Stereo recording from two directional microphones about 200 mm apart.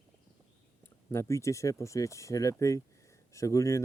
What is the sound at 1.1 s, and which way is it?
Speech, 15° left (ahead or behind).